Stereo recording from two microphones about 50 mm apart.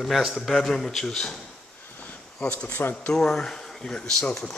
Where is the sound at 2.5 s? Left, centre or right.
Left.